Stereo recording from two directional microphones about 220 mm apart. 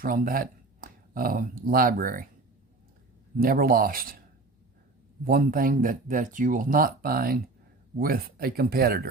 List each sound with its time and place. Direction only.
0.0 s speech: 40° right (ahead or behind)
3.3 s speech: 40° right (ahead or behind)
5.2 s speech: 40° right (ahead or behind)